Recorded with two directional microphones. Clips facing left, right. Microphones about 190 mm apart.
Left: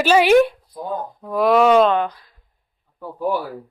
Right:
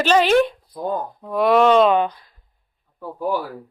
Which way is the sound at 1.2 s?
Centre (ahead or behind).